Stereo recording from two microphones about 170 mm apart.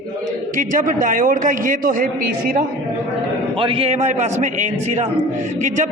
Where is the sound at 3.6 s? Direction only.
35° right (ahead or behind).